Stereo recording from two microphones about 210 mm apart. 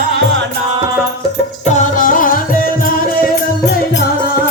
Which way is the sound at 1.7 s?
40° left (ahead or behind).